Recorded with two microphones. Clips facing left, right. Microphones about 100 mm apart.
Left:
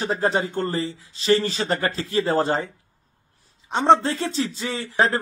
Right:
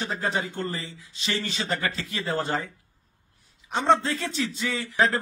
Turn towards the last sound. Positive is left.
turn(degrees=30)  # may be behind; listen again after turning